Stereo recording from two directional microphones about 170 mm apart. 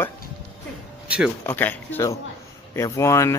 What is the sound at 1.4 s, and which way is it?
Speech, 10° left (ahead or behind).